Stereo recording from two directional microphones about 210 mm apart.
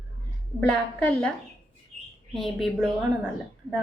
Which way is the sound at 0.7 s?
5° left (ahead or behind).